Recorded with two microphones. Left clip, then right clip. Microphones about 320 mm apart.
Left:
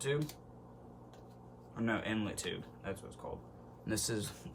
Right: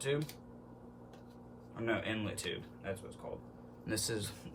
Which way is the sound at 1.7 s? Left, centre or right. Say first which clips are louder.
Even; centre.